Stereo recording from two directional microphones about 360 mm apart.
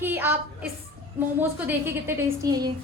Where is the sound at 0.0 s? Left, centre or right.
Centre.